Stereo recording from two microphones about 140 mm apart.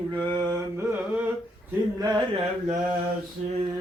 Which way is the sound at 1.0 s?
10° right (ahead or behind).